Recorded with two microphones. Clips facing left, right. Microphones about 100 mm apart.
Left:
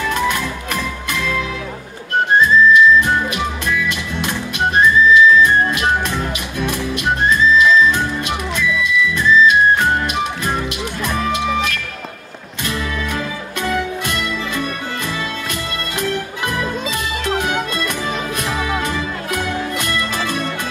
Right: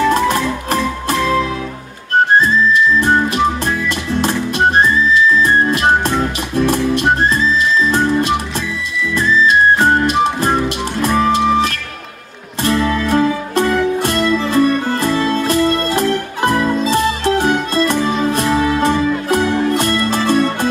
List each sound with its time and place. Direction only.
0.1 s music: 35° right (ahead or behind)
2.4 s music: 35° right (ahead or behind)